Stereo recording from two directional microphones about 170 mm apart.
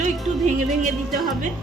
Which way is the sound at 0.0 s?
45° right (ahead or behind).